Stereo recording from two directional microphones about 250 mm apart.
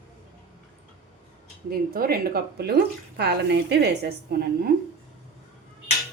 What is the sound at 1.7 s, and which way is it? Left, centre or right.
A woman's voice, right.